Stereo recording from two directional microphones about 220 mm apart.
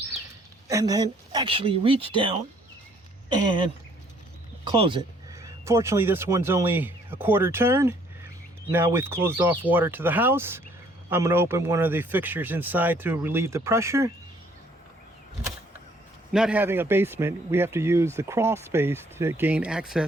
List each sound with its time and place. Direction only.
0.7 s speech: 15° right (ahead or behind)
4.6 s speech: 20° right (ahead or behind)
16.3 s speech: 5° right (ahead or behind)